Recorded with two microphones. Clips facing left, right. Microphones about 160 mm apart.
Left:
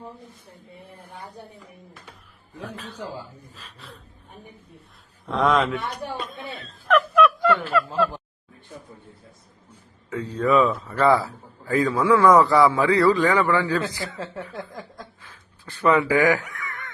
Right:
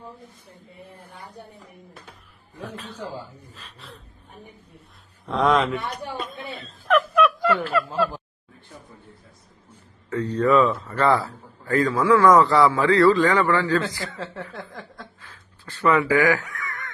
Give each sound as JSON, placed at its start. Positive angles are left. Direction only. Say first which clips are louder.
{"t": 2.6, "sound": "a man's voice", "louder": "even", "side_deg": 0}
{"t": 5.2, "sound": "a man's voice", "louder": "right 1 dB", "side_deg": 0}
{"t": 6.1, "sound": "a sound", "louder": "right 1 dB", "side_deg": 0}
{"t": 10.1, "sound": "a man's voice", "louder": "right 2 dB", "side_deg": 10}
{"t": 15.2, "sound": "honk", "louder": "even", "side_deg": 15}